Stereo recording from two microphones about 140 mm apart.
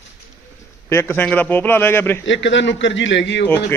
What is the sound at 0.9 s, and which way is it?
A man's voice, 15° left (ahead or behind).